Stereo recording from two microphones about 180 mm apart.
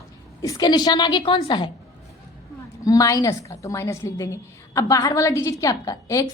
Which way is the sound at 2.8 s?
20° left (ahead or behind).